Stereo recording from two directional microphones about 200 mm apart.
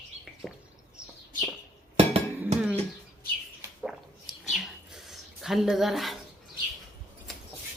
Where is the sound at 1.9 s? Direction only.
30° right (ahead or behind).